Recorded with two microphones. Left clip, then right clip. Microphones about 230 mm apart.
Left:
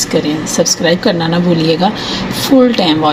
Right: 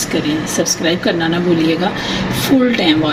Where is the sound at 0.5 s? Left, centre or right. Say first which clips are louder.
Left 6 dB; left.